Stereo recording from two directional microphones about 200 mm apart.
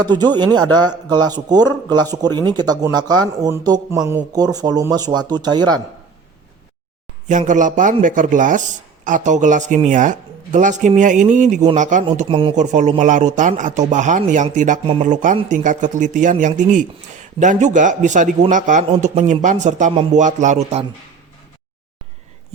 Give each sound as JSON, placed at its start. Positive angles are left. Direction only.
{"t": 0.0, "sound": "a man's voice", "side_deg": -20}
{"t": 7.3, "sound": "speech", "side_deg": -40}